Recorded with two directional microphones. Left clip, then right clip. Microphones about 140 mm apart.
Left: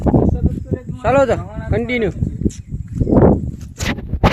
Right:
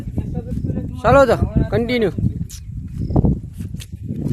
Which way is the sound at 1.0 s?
20° right (ahead or behind).